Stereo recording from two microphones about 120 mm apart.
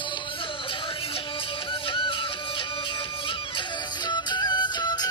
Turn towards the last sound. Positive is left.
turn(degrees=35)  # may be behind; listen again after turning